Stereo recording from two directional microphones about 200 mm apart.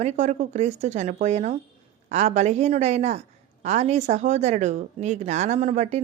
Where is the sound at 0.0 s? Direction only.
35° right (ahead or behind).